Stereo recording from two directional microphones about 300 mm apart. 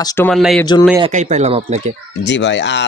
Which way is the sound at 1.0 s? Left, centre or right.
Right.